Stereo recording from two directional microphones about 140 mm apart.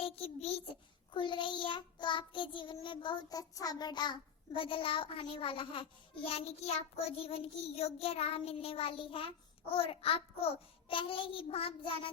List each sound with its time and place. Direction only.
0.0 s a child's voice: 45° left (ahead or behind)
1.1 s child singing: 35° left (ahead or behind)